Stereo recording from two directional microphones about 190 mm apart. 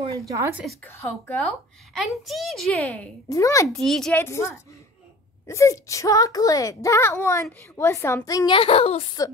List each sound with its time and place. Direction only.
0.3 s speech: 15° right (ahead or behind)
0.8 s a child's voice: 10° left (ahead or behind)
3.3 s speech: 15° left (ahead or behind)
3.7 s a woman's voice: centre (ahead or behind); by 9.0 s 30° left (ahead or behind)